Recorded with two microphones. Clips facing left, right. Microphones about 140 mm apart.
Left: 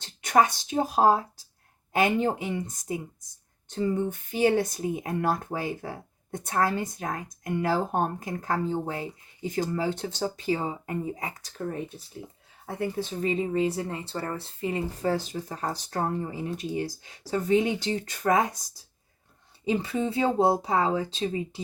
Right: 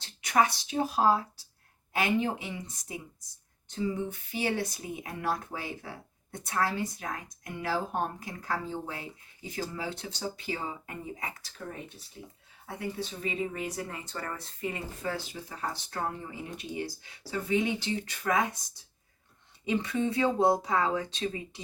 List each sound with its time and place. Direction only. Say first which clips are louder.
0.2 s speech: left 4 dB; 45° left (ahead or behind)
11.6 s speech: left 9 dB; 45° left (ahead or behind); by 21.6 s 30° left (ahead or behind)